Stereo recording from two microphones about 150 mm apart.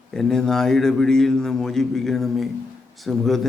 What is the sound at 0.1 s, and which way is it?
A man's voice, 5° left (ahead or behind).